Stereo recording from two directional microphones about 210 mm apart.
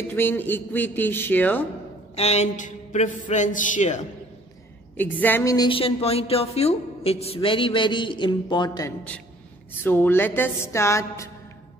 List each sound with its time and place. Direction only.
0.1 s speech: 10° left (ahead or behind)
2.1 s speech: 30° left (ahead or behind)
4.9 s a woman's voice: 10° left (ahead or behind)